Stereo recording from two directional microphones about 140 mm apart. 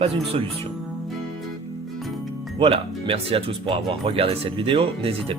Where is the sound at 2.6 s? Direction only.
40° right (ahead or behind).